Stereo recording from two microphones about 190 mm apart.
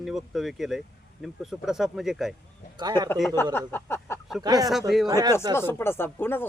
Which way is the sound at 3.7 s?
10° left (ahead or behind).